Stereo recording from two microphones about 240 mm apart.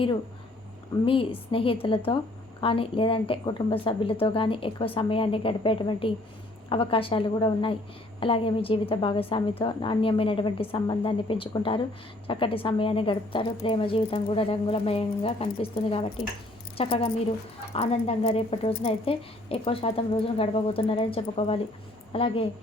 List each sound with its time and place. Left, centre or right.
1.0 s a woman's voice: left